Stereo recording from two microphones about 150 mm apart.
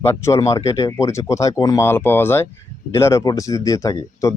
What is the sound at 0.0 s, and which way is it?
Speech, 15° left (ahead or behind).